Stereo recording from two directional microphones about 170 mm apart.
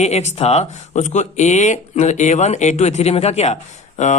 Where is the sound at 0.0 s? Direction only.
40° left (ahead or behind).